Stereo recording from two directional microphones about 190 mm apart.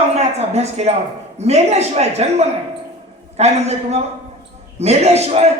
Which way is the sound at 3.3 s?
35° right (ahead or behind).